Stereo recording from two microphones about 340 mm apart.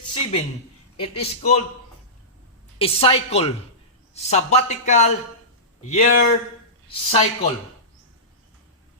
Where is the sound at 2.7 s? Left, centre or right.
Centre.